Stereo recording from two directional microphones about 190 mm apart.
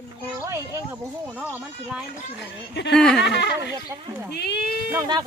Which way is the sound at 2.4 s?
65° left (ahead or behind).